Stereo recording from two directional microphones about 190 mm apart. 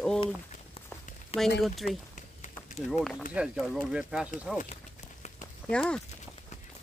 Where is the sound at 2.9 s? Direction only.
Centre (ahead or behind).